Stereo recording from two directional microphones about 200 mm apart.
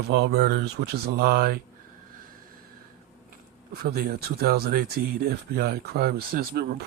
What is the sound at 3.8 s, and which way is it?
Speech, 50° right (ahead or behind).